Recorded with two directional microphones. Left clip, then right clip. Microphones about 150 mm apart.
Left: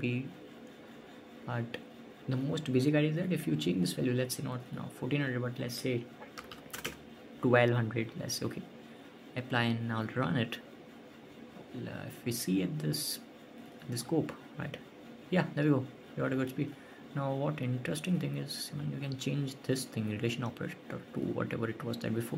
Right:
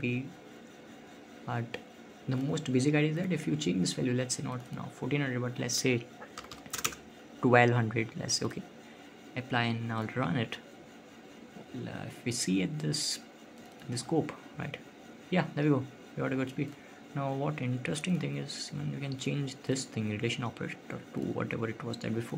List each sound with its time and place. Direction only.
1.5 s speech: 10° right (ahead or behind)
5.6 s speech: 30° right (ahead or behind)
7.4 s speech: 15° right (ahead or behind)
11.8 s speech: 15° right (ahead or behind)